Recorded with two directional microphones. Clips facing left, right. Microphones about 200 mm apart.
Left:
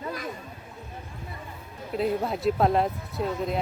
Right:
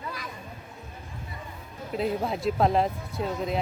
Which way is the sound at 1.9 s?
Centre (ahead or behind).